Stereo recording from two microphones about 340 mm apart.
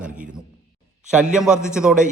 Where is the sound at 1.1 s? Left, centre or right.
Centre.